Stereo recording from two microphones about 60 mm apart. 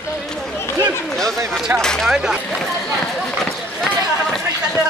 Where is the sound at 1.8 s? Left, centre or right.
Centre.